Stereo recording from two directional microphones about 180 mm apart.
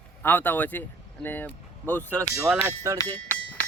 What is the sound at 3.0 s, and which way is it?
Music, 10° left (ahead or behind).